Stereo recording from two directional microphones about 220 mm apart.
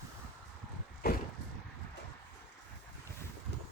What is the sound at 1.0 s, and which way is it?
Vehicle, 45° left (ahead or behind).